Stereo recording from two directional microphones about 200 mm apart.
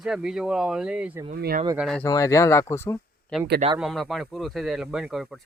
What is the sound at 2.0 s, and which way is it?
Speech, 15° left (ahead or behind).